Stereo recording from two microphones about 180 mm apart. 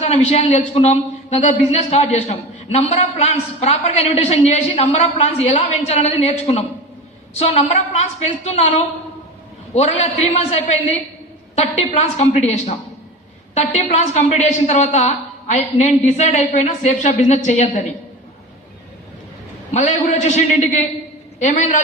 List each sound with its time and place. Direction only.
0.0 s a woman's voice: 35° left (ahead or behind)
19.7 s a woman's voice: 40° left (ahead or behind)